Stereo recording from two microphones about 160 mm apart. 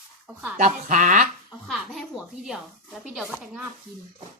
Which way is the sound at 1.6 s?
Centre (ahead or behind).